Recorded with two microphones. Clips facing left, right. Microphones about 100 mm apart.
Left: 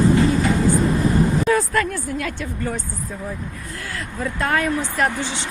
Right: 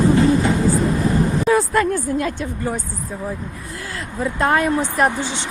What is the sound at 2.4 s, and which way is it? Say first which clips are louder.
Speech: right 2 dB; 15° right (ahead or behind).